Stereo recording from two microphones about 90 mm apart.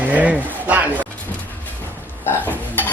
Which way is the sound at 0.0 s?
15° right (ahead or behind).